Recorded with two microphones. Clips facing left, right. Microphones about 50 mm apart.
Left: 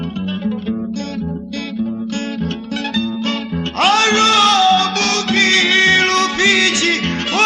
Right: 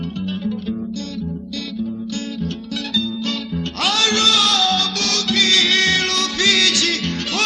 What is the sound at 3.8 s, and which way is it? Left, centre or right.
Music, left.